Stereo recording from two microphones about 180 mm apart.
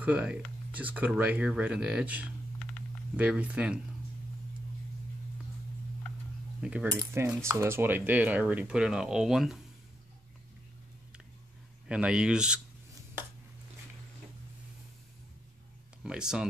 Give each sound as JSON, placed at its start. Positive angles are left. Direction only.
{"t": 0.0, "sound": "speech", "side_deg": -10}
{"t": 6.6, "sound": "speech", "side_deg": -5}
{"t": 6.9, "sound": "speech", "side_deg": -20}
{"t": 11.9, "sound": "speech", "side_deg": -5}
{"t": 16.0, "sound": "speech", "side_deg": -5}